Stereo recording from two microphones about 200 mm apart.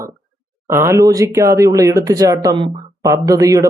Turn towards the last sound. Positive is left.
turn(degrees=-15)  # may be behind; listen again after turning